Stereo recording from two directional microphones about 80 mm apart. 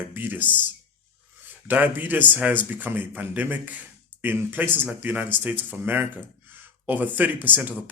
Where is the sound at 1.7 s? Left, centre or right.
Right.